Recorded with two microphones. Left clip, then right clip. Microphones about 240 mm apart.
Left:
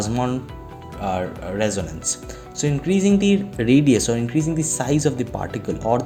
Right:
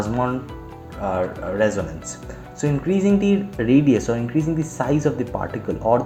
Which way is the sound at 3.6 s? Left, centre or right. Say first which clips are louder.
Even; left.